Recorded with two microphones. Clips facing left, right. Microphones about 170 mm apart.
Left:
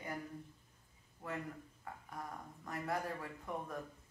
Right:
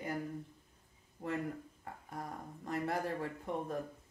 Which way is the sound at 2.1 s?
30° right (ahead or behind).